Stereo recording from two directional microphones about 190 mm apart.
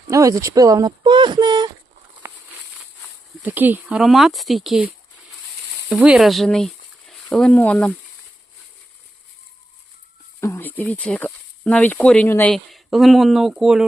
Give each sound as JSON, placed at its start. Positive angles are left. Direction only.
{"t": 0.1, "sound": "speech", "side_deg": -15}
{"t": 2.2, "sound": "a sound", "side_deg": -10}
{"t": 3.4, "sound": "speech", "side_deg": -10}
{"t": 5.9, "sound": "speech", "side_deg": -5}
{"t": 10.4, "sound": "speech", "side_deg": 10}